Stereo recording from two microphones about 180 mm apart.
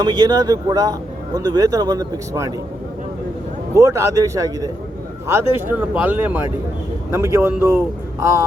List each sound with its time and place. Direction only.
0.0 s speech: 20° right (ahead or behind)
3.8 s speech: 15° right (ahead or behind)